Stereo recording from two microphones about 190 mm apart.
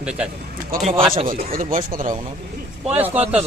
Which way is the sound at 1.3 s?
45° right (ahead or behind).